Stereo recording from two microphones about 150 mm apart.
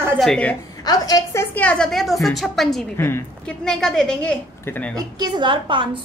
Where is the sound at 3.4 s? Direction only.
5° left (ahead or behind).